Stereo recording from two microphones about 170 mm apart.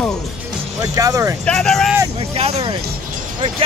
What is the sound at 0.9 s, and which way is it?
Speech, 20° right (ahead or behind).